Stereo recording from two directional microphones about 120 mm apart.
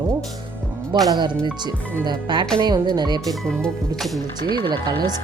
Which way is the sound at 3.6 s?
5° left (ahead or behind).